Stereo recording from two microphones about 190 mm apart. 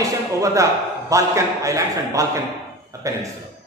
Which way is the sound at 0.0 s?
15° right (ahead or behind).